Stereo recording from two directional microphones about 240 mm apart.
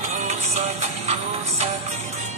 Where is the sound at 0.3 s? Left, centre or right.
Right.